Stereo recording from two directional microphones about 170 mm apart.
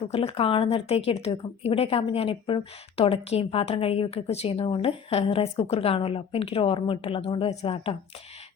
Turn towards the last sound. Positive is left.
turn(degrees=35)  # may be behind; listen again after turning